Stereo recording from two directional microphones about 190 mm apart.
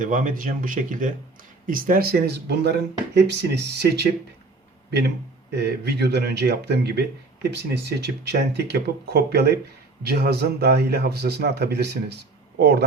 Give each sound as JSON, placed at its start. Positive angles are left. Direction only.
{"t": 0.0, "sound": "speech", "side_deg": -45}